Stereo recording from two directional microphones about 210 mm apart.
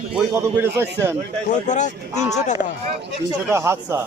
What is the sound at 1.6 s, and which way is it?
Speech, 35° left (ahead or behind).